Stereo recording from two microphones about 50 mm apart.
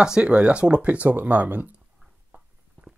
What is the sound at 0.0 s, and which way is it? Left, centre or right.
Speech, centre.